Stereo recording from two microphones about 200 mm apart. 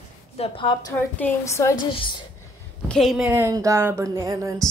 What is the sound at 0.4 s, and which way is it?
A woman's voice, 25° left (ahead or behind).